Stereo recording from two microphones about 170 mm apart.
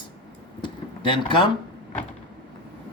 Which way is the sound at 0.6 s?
30° left (ahead or behind).